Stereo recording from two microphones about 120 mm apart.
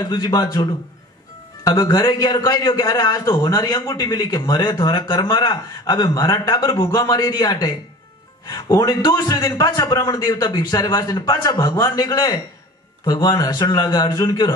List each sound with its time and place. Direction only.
0.0 s a man's voice: 30° left (ahead or behind)